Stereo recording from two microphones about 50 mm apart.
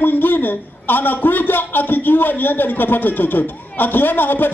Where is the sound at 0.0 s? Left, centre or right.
Left.